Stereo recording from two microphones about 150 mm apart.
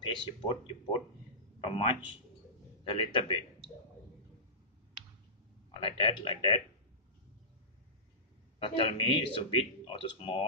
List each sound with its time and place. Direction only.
0.0 s speech: 30° left (ahead or behind)
1.6 s a man's voice: 35° left (ahead or behind)
5.7 s speech: 35° left (ahead or behind)
8.5 s speech: 35° left (ahead or behind)